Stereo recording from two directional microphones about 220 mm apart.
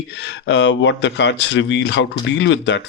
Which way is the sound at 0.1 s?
55° left (ahead or behind).